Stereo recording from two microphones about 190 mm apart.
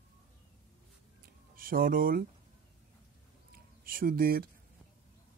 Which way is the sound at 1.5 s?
50° right (ahead or behind).